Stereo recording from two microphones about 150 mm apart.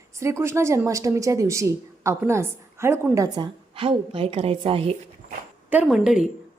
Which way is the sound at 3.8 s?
35° right (ahead or behind).